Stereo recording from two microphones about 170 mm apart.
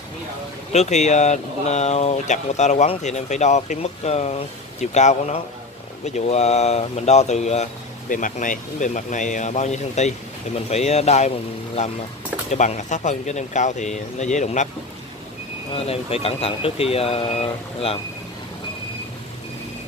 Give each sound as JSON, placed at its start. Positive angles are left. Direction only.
{"t": 0.7, "sound": "speech", "side_deg": 45}
{"t": 15.7, "sound": "speech", "side_deg": 35}